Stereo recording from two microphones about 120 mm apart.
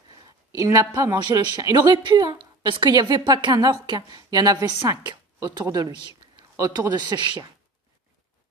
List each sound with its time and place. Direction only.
0.5 s a woman's voice: 25° right (ahead or behind)
6.5 s a woman's voice: 30° right (ahead or behind)